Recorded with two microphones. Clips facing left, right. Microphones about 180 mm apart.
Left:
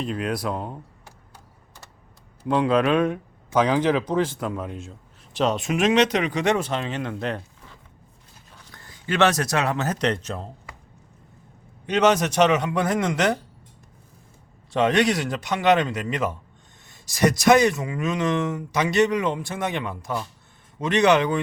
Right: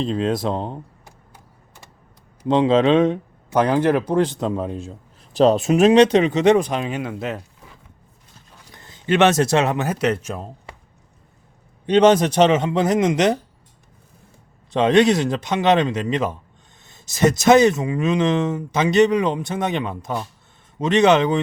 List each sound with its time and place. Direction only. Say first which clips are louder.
0.0 s speech: right 5 dB; 25° right (ahead or behind)
2.4 s speech: right 4 dB; 20° right (ahead or behind); by 7.4 s 5° right (ahead or behind)
8.7 s speech: right 7 dB; 20° right (ahead or behind)
9.8 s speech: right 3 dB; 10° right (ahead or behind)
11.9 s speech: right 6 dB; 30° right (ahead or behind)
14.7 s speech: right 5 dB; 20° right (ahead or behind)